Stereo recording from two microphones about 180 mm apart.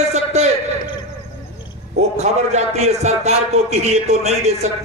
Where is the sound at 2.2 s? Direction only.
40° right (ahead or behind).